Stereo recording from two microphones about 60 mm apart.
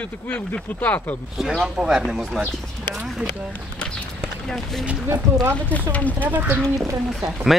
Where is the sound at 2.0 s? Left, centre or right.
Centre.